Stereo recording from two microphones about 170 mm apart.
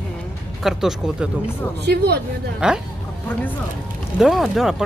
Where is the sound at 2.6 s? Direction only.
5° right (ahead or behind).